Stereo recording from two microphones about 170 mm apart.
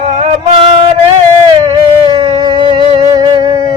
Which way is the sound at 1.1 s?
30° right (ahead or behind).